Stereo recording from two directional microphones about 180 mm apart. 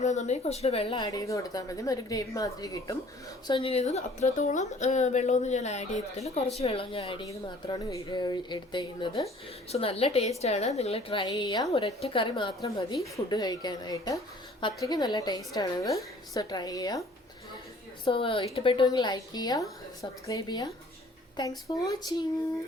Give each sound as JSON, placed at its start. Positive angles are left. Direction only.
{"t": 0.0, "sound": "a woman's voice", "side_deg": 40}
{"t": 7.3, "sound": "a woman's voice", "side_deg": 20}
{"t": 18.0, "sound": "speech", "side_deg": 30}
{"t": 21.7, "sound": "speech", "side_deg": 25}